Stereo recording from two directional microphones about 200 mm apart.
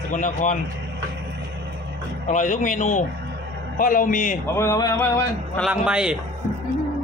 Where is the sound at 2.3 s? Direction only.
40° left (ahead or behind).